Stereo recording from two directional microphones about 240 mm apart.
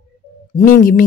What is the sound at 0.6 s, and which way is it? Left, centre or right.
Speech, left.